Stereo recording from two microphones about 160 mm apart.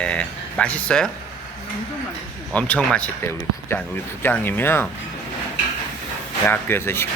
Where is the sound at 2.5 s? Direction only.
10° left (ahead or behind).